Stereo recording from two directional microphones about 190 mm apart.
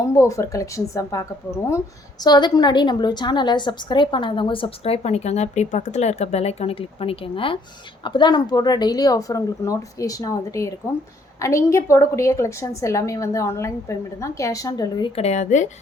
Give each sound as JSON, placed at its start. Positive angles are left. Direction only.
{"t": 0.0, "sound": "a woman's voice", "side_deg": 15}